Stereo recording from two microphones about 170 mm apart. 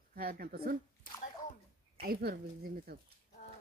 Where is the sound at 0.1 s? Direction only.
60° right (ahead or behind).